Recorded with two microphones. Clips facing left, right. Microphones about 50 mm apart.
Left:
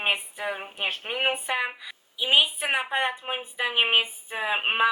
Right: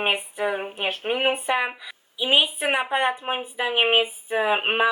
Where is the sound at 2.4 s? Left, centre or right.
Right.